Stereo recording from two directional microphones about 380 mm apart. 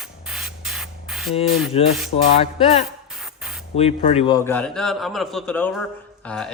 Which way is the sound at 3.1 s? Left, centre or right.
Centre.